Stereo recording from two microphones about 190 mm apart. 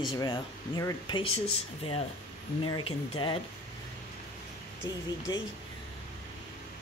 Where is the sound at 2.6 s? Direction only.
25° left (ahead or behind).